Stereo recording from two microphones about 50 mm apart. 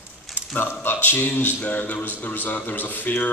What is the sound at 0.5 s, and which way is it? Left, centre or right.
Speech, left.